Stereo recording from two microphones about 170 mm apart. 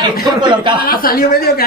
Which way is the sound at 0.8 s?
60° left (ahead or behind).